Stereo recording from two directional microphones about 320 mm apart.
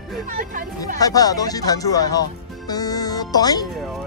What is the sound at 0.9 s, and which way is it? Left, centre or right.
Speech, centre.